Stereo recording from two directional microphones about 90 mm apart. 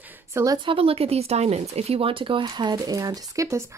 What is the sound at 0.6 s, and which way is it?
Speech, 85° right.